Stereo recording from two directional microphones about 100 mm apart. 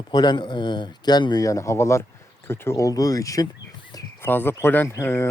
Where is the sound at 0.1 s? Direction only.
45° left (ahead or behind).